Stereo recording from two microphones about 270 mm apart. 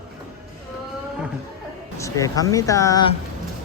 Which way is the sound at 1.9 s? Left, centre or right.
Centre.